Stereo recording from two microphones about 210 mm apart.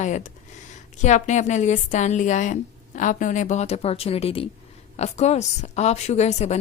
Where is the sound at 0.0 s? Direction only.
35° left (ahead or behind).